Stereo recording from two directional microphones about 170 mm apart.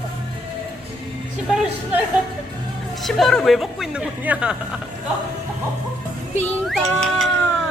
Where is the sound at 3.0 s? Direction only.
Centre (ahead or behind).